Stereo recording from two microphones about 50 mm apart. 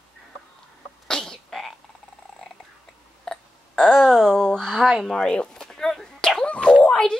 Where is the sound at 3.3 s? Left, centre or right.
Centre.